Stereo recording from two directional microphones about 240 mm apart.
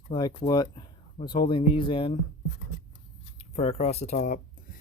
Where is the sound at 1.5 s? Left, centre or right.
Left.